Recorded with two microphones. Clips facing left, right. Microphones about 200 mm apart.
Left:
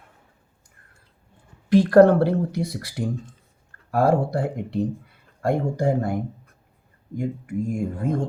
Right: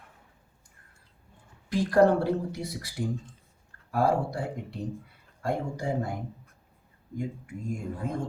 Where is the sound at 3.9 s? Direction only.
80° left.